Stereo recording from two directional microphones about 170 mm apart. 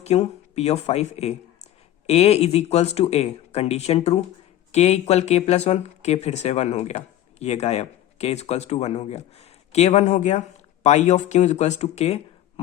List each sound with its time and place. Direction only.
0.0 s speech: 40° left (ahead or behind)